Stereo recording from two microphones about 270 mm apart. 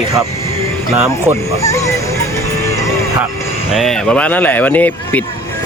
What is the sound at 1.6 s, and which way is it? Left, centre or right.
Speech, centre.